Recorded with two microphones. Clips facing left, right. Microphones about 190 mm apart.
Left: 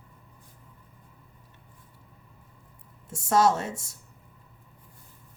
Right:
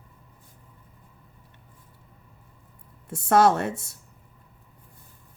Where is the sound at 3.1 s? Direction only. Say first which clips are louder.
Right 3 dB; 60° right (ahead or behind).